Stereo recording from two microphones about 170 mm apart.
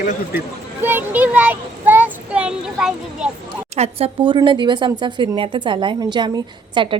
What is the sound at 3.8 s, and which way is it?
Speech, 35° right (ahead or behind).